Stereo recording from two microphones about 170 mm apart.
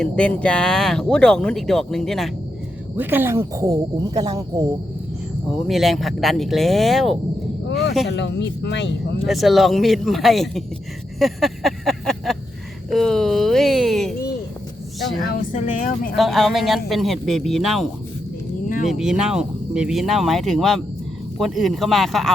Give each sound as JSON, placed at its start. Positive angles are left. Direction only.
{"t": 0.0, "sound": "speech", "side_deg": 5}
{"t": 2.9, "sound": "speech", "side_deg": -10}
{"t": 5.5, "sound": "speech", "side_deg": 0}
{"t": 7.7, "sound": "a sound", "side_deg": 90}
{"t": 8.1, "sound": "speech", "side_deg": 90}
{"t": 9.2, "sound": "speech", "side_deg": 0}
{"t": 11.2, "sound": "a sound", "side_deg": 0}
{"t": 12.9, "sound": "speech", "side_deg": 0}
{"t": 15.2, "sound": "speech", "side_deg": 55}
{"t": 16.1, "sound": "speech", "side_deg": 0}
{"t": 18.9, "sound": "speech", "side_deg": -5}